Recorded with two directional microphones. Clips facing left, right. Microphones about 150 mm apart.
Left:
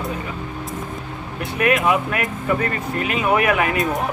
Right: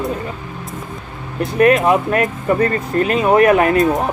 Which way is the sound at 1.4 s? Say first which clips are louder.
Right 6 dB; 40° right (ahead or behind).